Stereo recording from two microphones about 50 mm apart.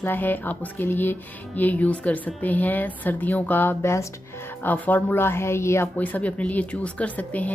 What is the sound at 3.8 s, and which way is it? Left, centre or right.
Speech, left.